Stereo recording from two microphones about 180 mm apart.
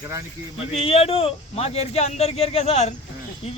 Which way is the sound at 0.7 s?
35° left (ahead or behind).